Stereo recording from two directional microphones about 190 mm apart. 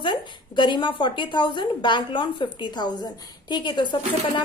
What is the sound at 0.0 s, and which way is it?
A woman's voice, 25° left (ahead or behind).